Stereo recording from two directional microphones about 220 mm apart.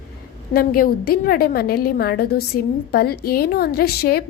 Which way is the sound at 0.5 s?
45° left (ahead or behind).